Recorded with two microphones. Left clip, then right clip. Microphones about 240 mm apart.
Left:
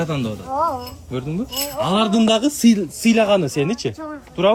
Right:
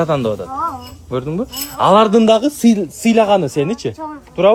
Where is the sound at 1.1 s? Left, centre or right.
Centre.